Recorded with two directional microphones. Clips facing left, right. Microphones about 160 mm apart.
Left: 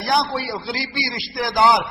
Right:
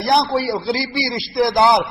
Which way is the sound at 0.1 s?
35° right (ahead or behind).